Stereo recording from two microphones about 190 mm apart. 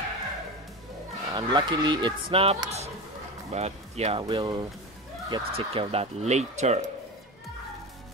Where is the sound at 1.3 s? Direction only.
20° right (ahead or behind); by 6.8 s 35° right (ahead or behind).